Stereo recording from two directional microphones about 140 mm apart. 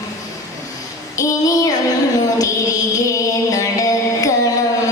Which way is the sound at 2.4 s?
25° left (ahead or behind).